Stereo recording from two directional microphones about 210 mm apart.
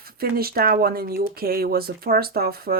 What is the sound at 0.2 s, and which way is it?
Speech, 45° right (ahead or behind).